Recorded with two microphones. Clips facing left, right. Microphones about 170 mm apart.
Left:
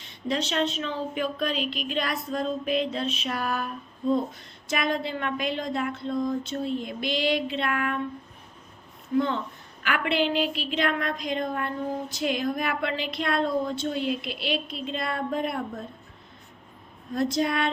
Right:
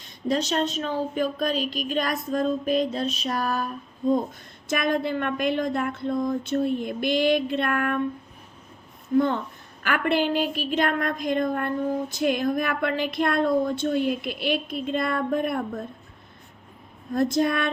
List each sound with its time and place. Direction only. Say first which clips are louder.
0.0 s speech: right 3 dB; 40° right (ahead or behind)
4.7 s a woman's voice: right 3 dB; 50° right (ahead or behind)
9.1 s a woman's voice: right 3 dB; 50° right (ahead or behind)
17.2 s a woman's voice: right 3 dB; 50° right (ahead or behind)